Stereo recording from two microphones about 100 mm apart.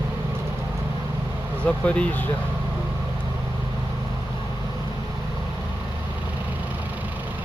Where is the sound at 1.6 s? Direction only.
10° left (ahead or behind).